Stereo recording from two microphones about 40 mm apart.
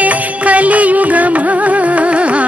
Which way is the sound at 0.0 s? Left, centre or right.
Right.